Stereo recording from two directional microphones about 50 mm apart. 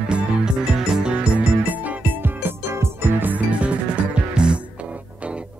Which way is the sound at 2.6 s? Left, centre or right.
Right.